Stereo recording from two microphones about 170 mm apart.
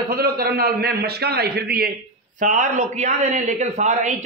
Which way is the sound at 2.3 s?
50° right (ahead or behind).